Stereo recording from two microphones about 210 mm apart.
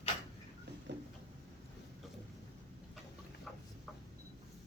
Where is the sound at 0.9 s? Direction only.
55° right (ahead or behind).